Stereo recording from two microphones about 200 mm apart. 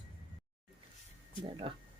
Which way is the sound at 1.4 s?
25° right (ahead or behind).